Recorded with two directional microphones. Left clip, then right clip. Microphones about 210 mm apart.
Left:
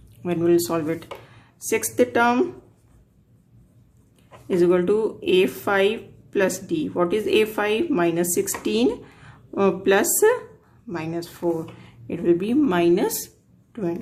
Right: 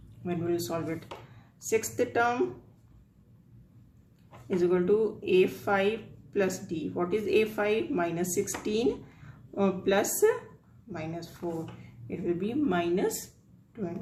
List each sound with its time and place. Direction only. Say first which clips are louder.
0.3 s speech: left 11 dB; 55° left (ahead or behind)
4.4 s speech: left 7 dB; 55° left (ahead or behind)